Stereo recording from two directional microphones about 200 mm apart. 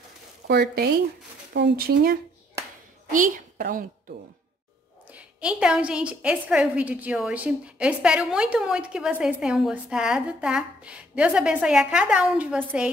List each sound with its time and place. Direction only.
0.5 s speech: 50° right (ahead or behind)
3.1 s a woman's voice: 40° right (ahead or behind)
5.1 s a woman's voice: 5° right (ahead or behind)